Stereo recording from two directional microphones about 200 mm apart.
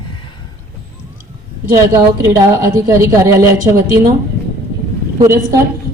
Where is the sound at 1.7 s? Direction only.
15° right (ahead or behind).